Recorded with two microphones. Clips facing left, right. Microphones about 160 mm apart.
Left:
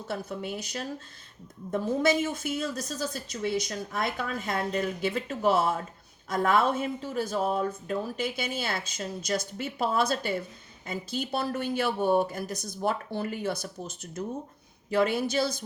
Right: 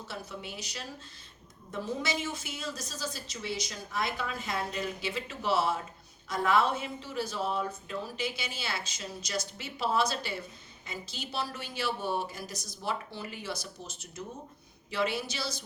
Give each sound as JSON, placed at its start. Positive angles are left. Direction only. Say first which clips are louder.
{"t": 0.1, "sound": "a woman's voice", "louder": "left 9 dB", "side_deg": 50}